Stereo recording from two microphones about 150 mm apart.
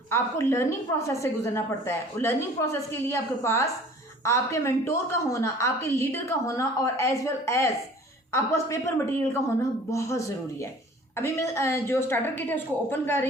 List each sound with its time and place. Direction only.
0.1 s a woman's voice: 20° left (ahead or behind)
9.2 s a woman's voice: 15° left (ahead or behind)